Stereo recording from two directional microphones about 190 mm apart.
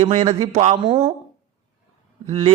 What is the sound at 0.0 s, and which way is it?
Speech, 35° right (ahead or behind).